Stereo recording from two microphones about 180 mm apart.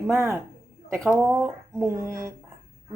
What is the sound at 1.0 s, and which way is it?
Speech, centre (ahead or behind).